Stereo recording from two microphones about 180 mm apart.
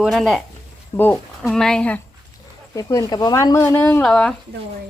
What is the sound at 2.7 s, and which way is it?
Speech, 20° left (ahead or behind).